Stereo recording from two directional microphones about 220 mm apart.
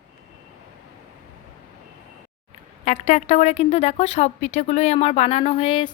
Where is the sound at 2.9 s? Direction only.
30° left (ahead or behind).